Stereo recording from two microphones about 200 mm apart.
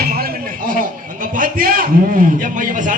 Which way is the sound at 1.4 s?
45° right (ahead or behind).